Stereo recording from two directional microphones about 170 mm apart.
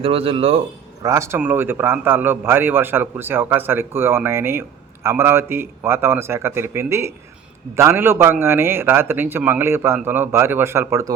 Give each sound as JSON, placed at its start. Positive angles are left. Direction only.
{"t": 0.0, "sound": "speech", "side_deg": -35}
{"t": 1.0, "sound": "a man's voice", "side_deg": -15}